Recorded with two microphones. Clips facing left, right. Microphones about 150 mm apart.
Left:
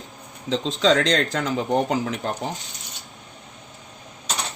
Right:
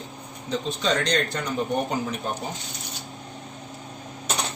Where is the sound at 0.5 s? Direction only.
90° left.